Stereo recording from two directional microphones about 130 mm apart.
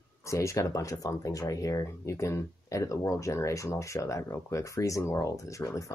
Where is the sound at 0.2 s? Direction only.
25° left (ahead or behind).